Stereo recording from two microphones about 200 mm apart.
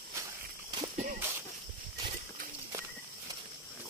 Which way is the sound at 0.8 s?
35° right (ahead or behind).